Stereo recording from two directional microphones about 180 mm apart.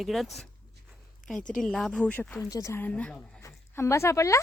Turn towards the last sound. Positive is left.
turn(degrees=15)  # may be behind; listen again after turning